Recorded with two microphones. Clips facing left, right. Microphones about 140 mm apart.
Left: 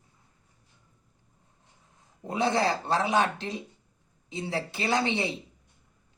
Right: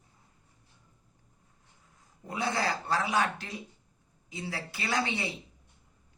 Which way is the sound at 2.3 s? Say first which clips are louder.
Left 5 dB; 25° left (ahead or behind).